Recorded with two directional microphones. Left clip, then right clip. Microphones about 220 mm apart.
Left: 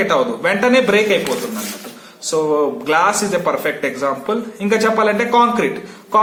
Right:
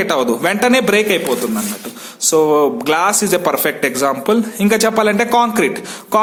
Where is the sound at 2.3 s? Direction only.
50° right (ahead or behind).